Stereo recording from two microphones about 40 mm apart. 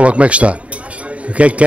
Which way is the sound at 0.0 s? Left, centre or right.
Right.